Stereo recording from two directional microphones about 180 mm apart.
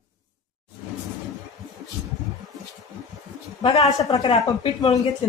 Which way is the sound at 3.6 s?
35° left (ahead or behind).